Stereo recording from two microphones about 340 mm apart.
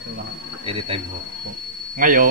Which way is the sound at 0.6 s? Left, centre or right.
Centre.